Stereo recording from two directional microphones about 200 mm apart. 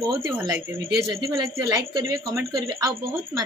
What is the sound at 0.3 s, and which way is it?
A woman's voice, 10° right (ahead or behind).